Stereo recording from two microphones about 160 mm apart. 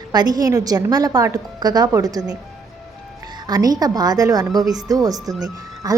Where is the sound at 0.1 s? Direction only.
25° right (ahead or behind).